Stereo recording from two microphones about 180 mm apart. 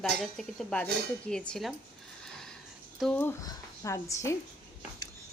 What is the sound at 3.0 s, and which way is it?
A woman's voice, 5° left (ahead or behind).